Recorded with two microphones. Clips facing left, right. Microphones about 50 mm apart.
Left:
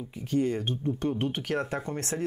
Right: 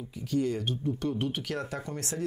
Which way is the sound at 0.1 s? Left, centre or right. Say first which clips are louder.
Left 2 dB; left.